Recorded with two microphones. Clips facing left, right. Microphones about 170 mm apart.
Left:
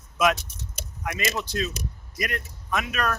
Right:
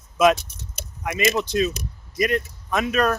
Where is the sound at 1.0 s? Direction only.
20° right (ahead or behind).